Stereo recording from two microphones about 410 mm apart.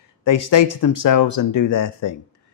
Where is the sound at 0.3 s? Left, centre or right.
Left.